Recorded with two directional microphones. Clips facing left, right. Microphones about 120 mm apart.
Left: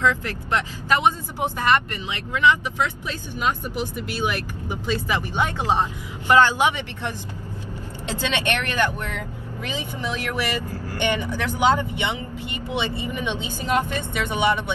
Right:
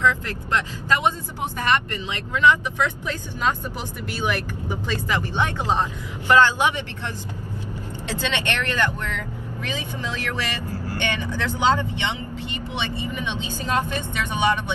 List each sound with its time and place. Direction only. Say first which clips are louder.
0.0 s speech: even; 20° left (ahead or behind)